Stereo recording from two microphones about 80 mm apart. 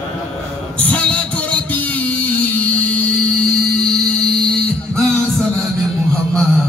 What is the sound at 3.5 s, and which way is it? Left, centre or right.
Music, centre.